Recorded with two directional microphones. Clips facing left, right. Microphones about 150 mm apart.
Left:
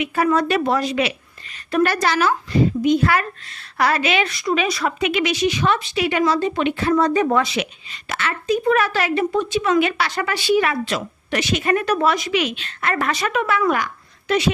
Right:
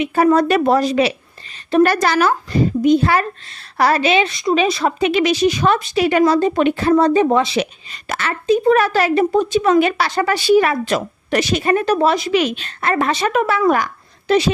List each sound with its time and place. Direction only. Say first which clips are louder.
0.0 s a woman's voice: right 5 dB; 35° right (ahead or behind)
7.5 s a woman's voice: right 5 dB; 40° right (ahead or behind)